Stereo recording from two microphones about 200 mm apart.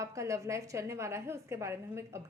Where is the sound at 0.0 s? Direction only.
15° right (ahead or behind).